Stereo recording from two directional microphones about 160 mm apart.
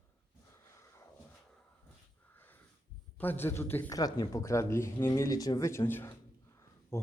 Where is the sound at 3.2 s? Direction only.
10° left (ahead or behind).